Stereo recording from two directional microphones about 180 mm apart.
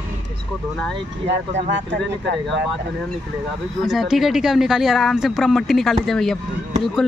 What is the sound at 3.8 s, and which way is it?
Speech, centre (ahead or behind).